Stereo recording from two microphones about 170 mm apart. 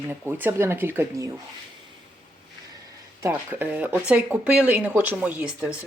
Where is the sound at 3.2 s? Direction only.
10° right (ahead or behind).